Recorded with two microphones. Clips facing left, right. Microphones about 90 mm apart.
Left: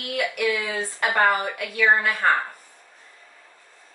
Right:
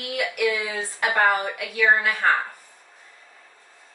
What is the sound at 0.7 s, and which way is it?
Speech, centre (ahead or behind).